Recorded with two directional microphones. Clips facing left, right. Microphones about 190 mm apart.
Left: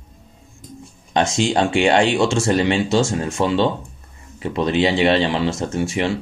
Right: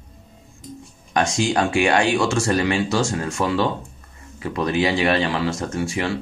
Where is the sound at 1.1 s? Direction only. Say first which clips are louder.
Left 2 dB; 25° left (ahead or behind).